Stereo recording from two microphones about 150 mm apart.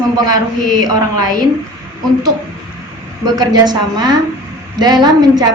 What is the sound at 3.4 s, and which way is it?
Speech, 25° right (ahead or behind).